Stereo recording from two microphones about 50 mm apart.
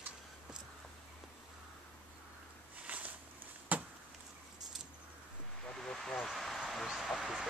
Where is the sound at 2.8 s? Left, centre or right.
Right.